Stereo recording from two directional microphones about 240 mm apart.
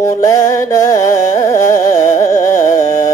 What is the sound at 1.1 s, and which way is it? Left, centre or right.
Carnatic music, left.